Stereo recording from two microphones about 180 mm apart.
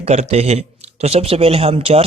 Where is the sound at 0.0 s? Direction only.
35° right (ahead or behind).